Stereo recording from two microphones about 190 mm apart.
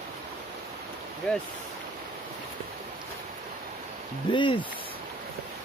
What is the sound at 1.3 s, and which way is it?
Speech, 5° left (ahead or behind).